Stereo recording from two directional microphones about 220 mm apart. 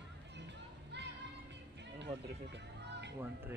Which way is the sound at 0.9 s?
50° right (ahead or behind).